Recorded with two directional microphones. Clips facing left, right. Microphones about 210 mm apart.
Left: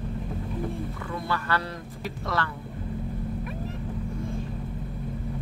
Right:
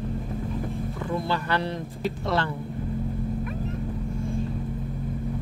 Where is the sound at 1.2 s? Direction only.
25° right (ahead or behind).